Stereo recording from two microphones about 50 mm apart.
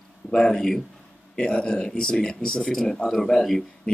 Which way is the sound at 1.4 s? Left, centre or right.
Centre.